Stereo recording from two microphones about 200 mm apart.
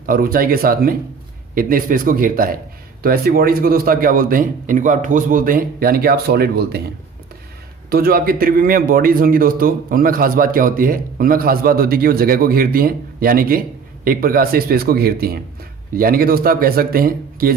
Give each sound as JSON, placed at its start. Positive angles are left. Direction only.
{"t": 0.0, "sound": "a man's voice", "side_deg": -45}
{"t": 7.9, "sound": "a man's voice", "side_deg": -50}